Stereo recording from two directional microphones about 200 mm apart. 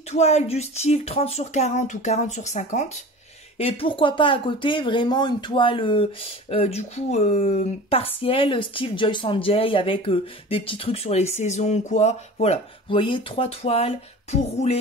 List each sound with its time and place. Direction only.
0.1 s speech: 35° left (ahead or behind)